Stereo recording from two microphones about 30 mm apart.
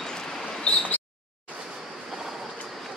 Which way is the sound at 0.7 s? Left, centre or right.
Left.